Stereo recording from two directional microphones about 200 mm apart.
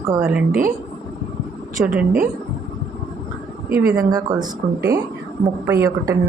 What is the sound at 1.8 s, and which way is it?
Speech, 10° right (ahead or behind).